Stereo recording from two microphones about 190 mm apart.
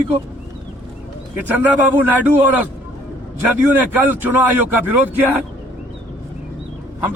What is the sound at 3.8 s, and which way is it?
Speech, 10° right (ahead or behind).